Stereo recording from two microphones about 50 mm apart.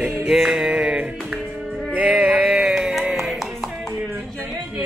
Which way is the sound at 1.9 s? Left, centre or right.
Centre.